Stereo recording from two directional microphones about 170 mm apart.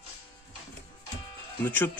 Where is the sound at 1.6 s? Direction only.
10° left (ahead or behind).